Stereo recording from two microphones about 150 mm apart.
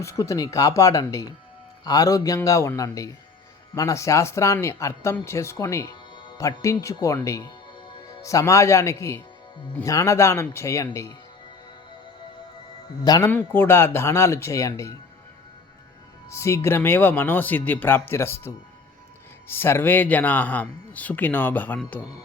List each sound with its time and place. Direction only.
0.0 s speech: 20° left (ahead or behind)
13.1 s speech: 25° left (ahead or behind)
13.3 s speech: 15° left (ahead or behind)
16.3 s speech: 20° left (ahead or behind)